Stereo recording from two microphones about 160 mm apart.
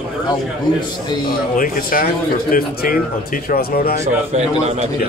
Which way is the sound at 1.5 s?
60° left (ahead or behind).